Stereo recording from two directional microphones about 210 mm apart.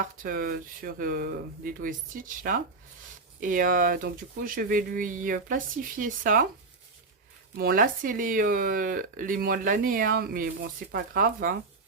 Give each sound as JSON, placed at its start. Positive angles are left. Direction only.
{"t": 0.0, "sound": "speech", "side_deg": -40}
{"t": 7.5, "sound": "speech", "side_deg": -45}